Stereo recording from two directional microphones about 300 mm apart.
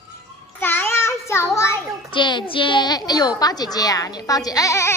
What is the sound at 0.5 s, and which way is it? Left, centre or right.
A child's voice, centre.